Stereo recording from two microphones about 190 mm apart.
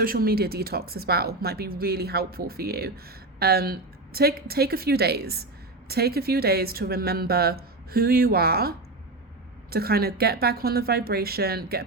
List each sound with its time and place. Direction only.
0.0 s speech: 50° right (ahead or behind)